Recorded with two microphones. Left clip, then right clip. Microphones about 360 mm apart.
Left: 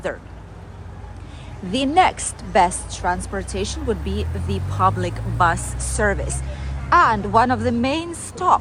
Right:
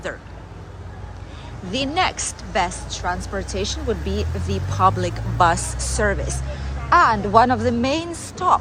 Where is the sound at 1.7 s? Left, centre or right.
Centre.